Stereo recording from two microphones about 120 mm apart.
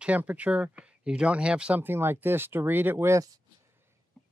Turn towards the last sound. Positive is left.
turn(degrees=-20)  # may be behind; listen again after turning